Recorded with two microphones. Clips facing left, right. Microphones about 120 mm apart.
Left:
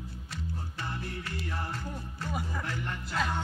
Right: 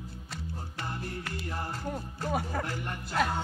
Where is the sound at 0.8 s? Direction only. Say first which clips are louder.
Right 1 dB; 35° right (ahead or behind).